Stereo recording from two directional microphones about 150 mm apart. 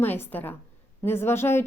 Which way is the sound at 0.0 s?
15° left (ahead or behind).